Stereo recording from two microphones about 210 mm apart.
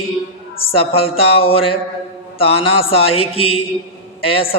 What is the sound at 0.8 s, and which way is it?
Speech, 25° left (ahead or behind).